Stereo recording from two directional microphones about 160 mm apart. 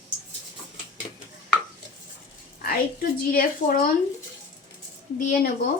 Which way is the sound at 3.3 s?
65° left (ahead or behind).